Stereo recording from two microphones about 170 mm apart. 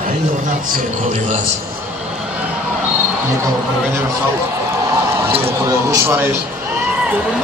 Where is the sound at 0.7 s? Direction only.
45° right (ahead or behind).